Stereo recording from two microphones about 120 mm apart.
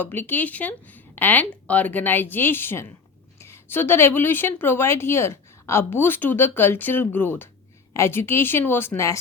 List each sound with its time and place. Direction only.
0.0 s a woman's voice: 15° left (ahead or behind)